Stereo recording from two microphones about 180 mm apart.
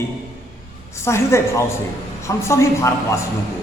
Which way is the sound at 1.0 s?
15° left (ahead or behind).